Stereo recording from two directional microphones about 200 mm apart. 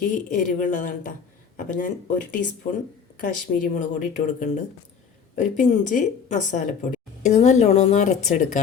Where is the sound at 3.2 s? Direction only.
40° left (ahead or behind).